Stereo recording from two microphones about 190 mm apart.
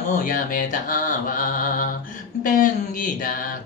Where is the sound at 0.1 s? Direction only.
45° left (ahead or behind).